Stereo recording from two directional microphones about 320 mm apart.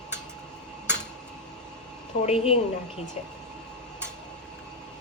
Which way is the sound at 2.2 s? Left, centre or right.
Centre.